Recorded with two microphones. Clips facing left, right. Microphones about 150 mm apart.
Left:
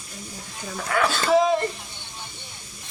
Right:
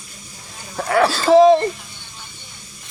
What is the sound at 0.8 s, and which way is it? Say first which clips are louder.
Speech: right 7 dB; 35° right (ahead or behind).